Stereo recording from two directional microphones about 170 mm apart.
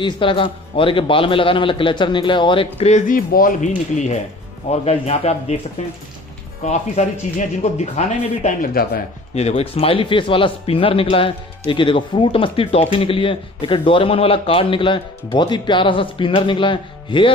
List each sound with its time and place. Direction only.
0.0 s speech: 30° left (ahead or behind)
3.2 s speech: 55° left (ahead or behind); by 5.6 s 40° left (ahead or behind)
6.6 s speech: 45° left (ahead or behind)
9.3 s speech: 35° left (ahead or behind)